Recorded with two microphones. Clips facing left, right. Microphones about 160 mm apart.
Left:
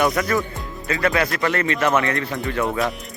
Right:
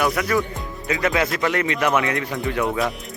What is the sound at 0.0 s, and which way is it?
Speech, 5° right (ahead or behind).